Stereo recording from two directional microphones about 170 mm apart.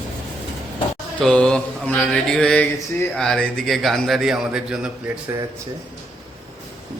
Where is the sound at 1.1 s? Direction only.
5° left (ahead or behind).